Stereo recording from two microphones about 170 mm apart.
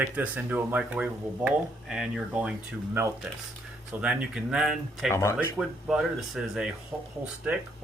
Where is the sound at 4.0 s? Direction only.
5° right (ahead or behind).